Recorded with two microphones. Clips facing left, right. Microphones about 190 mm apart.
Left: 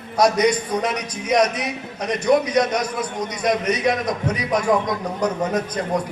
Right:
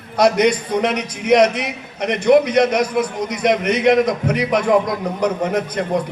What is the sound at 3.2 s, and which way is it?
A man's voice, 55° right (ahead or behind).